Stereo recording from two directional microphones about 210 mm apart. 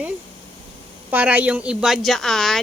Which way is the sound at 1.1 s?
5° right (ahead or behind).